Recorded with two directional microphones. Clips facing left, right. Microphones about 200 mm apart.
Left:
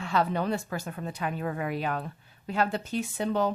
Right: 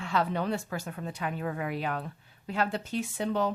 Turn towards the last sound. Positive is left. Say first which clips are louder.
# left 2 dB
turn(degrees=45)  # may be behind; listen again after turning